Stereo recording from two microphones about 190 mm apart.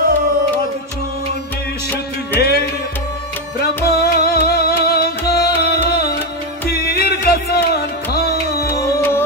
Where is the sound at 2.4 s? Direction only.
55° left (ahead or behind).